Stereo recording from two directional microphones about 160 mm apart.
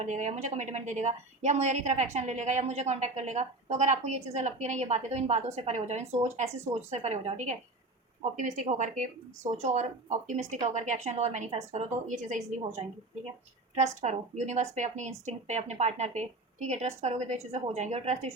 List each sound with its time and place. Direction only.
0.0 s a woman's voice: 50° right (ahead or behind)
13.7 s a woman's voice: 45° right (ahead or behind)